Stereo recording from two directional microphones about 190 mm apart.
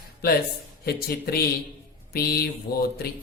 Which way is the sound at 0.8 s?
55° left (ahead or behind).